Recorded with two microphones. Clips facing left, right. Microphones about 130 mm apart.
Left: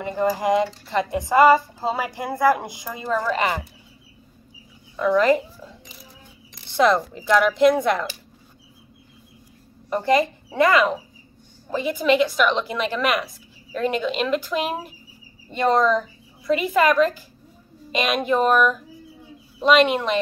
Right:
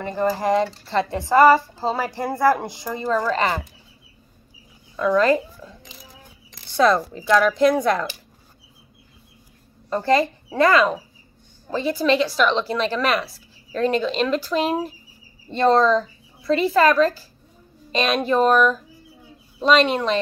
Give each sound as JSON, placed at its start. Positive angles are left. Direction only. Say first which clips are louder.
{"t": 0.0, "sound": "a woman's voice", "louder": "even", "side_deg": 15}
{"t": 4.9, "sound": "a sound", "louder": "even", "side_deg": 20}
{"t": 7.2, "sound": "speech", "louder": "right 1 dB", "side_deg": 15}
{"t": 9.8, "sound": "a woman's voice", "louder": "even", "side_deg": 15}